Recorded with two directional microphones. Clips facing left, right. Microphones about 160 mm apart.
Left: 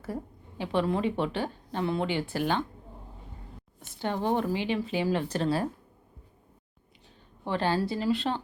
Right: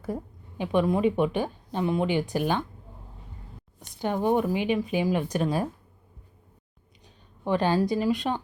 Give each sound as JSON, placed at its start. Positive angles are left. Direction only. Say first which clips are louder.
{"t": 0.6, "sound": "a woman's voice", "louder": "right 4 dB", "side_deg": -15}
{"t": 3.8, "sound": "a woman's voice", "louder": "right 3 dB", "side_deg": -15}
{"t": 7.4, "sound": "a woman's voice", "louder": "right 4 dB", "side_deg": -15}